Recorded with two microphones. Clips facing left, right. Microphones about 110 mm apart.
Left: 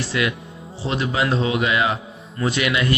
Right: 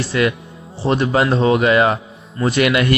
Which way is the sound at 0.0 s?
40° right (ahead or behind).